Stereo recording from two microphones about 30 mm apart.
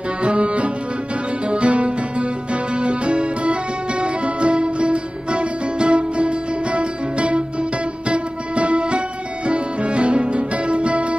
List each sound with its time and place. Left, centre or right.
0.2 s music: right